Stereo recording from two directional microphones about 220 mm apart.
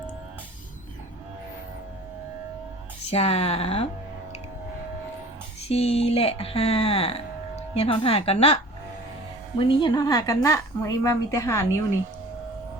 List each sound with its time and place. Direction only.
3.1 s speech: 30° left (ahead or behind)
5.6 s speech: 30° left (ahead or behind)
9.6 s a woman's voice: 20° left (ahead or behind)